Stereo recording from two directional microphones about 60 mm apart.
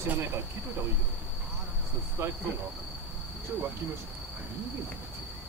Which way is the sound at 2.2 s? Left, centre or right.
Right.